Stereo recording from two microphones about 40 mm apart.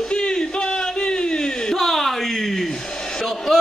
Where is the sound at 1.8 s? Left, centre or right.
Centre.